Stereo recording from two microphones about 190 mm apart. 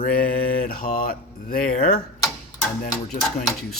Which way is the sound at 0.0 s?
50° left (ahead or behind).